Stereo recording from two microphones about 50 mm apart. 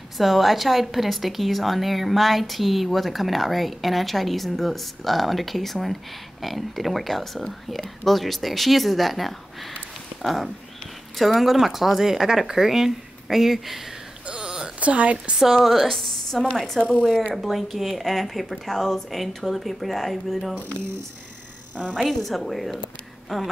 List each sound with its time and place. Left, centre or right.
0.2 s a woman's voice: centre
14.2 s a sound: centre
14.8 s a woman's voice: right
15.3 s a woman's voice: centre
21.9 s a woman's voice: centre